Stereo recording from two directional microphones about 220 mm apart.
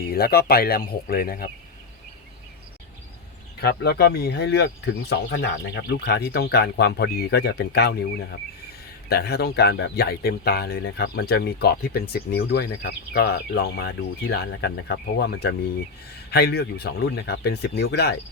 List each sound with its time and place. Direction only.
0.0 s speech: 45° left (ahead or behind)
3.6 s speech: 45° left (ahead or behind)
9.0 s speech: 45° left (ahead or behind)